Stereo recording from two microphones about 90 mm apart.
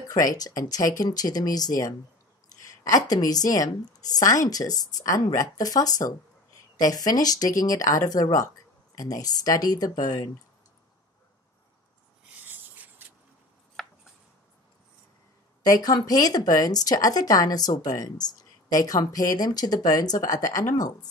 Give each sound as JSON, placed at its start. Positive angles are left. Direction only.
{"t": 0.1, "sound": "speech", "side_deg": 45}
{"t": 12.4, "sound": "a sound", "side_deg": -20}
{"t": 13.8, "sound": "chopping", "side_deg": 5}
{"t": 15.7, "sound": "speech", "side_deg": 45}